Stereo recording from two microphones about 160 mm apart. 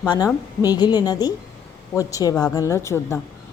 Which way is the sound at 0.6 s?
25° left (ahead or behind).